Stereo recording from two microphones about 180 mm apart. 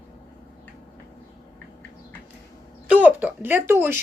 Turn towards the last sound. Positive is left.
turn(degrees=-10)  # may be behind; listen again after turning